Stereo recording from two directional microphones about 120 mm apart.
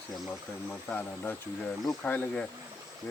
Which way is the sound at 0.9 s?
15° left (ahead or behind).